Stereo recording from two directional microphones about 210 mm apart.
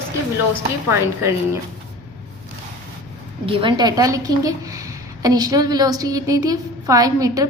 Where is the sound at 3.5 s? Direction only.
25° right (ahead or behind).